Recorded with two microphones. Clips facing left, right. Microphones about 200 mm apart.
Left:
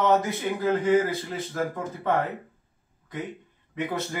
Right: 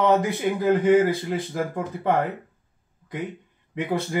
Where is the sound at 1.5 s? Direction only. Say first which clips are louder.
Left 1 dB; 15° right (ahead or behind).